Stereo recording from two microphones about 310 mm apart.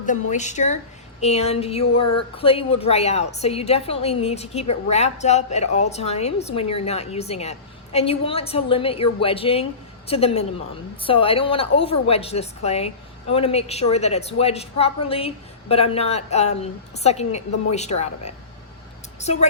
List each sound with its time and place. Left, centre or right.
0.0 s a woman's voice: left